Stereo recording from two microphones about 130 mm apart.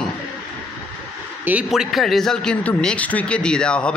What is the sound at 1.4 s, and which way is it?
Speech, 10° right (ahead or behind).